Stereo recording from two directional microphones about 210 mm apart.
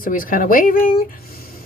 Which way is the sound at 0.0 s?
40° left (ahead or behind).